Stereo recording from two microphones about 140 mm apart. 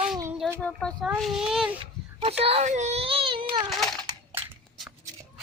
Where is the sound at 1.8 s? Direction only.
45° right (ahead or behind).